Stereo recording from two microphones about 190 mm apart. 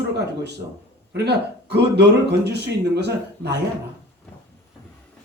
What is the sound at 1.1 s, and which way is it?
Speech, 65° right (ahead or behind).